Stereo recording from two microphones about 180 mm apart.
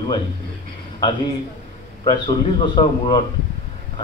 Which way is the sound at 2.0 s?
25° left (ahead or behind).